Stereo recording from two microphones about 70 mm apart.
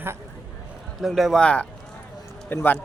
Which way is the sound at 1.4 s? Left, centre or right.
Centre.